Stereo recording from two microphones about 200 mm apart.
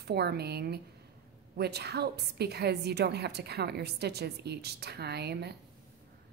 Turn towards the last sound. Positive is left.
turn(degrees=-55)  # may be behind; listen again after turning